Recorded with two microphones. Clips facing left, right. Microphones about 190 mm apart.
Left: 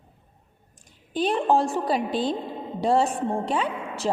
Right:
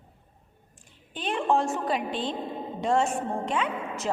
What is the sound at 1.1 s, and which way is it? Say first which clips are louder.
A woman's voice: left 4 dB; 35° left (ahead or behind).